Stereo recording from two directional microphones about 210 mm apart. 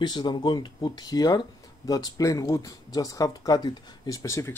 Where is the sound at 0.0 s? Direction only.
20° left (ahead or behind).